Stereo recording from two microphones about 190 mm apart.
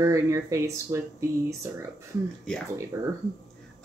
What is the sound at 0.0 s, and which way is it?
Speech, 15° right (ahead or behind).